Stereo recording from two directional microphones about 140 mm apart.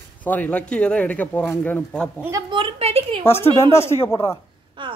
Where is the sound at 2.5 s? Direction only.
40° right (ahead or behind).